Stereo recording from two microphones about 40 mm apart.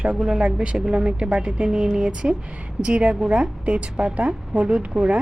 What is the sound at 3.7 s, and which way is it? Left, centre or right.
Speech, right.